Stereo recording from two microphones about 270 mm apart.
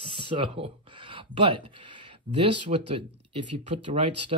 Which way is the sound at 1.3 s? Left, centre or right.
Centre.